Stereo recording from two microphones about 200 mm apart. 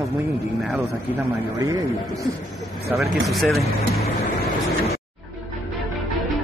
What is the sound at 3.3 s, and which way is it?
Speech, centre (ahead or behind).